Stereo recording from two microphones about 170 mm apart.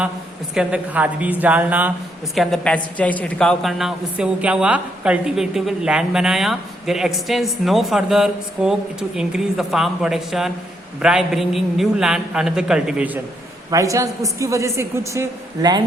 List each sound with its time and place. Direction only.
0.5 s a woman's voice: 5° right (ahead or behind)
13.7 s a woman's voice: 20° right (ahead or behind)